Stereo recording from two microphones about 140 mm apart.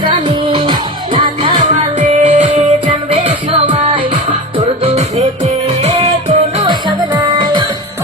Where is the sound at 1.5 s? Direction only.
55° right (ahead or behind); by 4.1 s 40° right (ahead or behind).